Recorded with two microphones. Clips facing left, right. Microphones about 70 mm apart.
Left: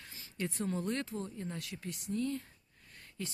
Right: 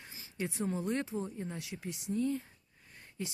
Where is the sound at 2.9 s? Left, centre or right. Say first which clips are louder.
Right 2 dB; centre.